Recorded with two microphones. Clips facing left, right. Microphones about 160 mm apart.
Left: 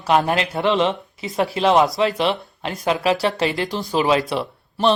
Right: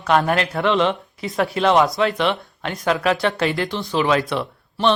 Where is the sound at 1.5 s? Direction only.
30° left (ahead or behind).